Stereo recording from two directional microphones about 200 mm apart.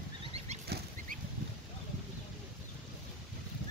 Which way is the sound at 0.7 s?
55° right (ahead or behind).